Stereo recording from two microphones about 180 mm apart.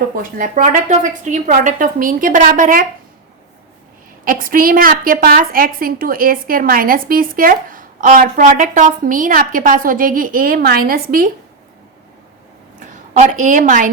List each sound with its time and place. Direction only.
0.2 s a woman's voice: 45° right (ahead or behind)
4.3 s a woman's voice: 50° right (ahead or behind)
12.8 s a woman's voice: 45° right (ahead or behind)